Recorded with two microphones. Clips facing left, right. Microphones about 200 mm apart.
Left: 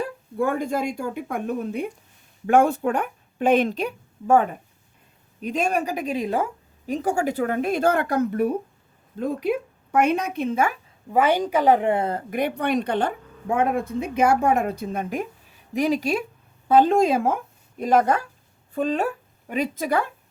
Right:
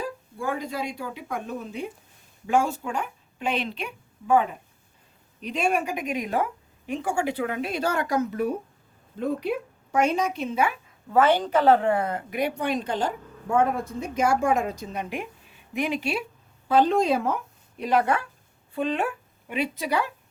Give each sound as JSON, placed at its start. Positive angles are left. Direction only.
{"t": 0.3, "sound": "a woman's voice", "side_deg": 55}
{"t": 11.1, "sound": "a woman's voice", "side_deg": 10}
{"t": 12.3, "sound": "speech", "side_deg": 55}
{"t": 16.6, "sound": "speech", "side_deg": 50}